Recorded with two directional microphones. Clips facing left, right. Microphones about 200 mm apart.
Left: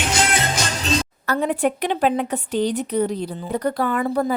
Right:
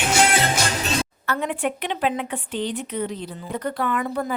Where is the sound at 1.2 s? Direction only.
35° left (ahead or behind).